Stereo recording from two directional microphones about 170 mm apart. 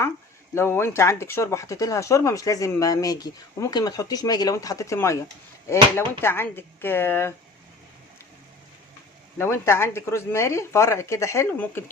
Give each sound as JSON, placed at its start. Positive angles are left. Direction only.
{"t": 0.5, "sound": "speech", "side_deg": 15}
{"t": 9.4, "sound": "speech", "side_deg": 15}